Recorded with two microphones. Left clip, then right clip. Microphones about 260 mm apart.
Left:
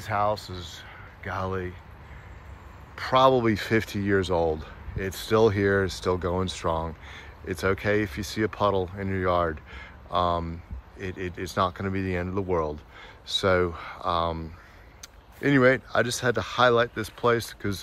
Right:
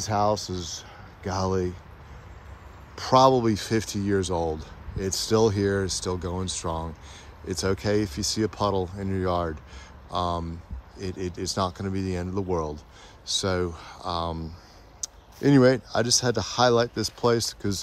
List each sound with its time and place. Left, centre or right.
0.0 s speech: right
3.0 s speech: right